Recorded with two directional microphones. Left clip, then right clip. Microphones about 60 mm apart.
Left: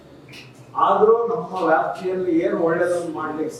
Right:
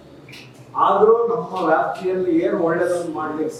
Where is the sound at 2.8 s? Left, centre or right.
Centre.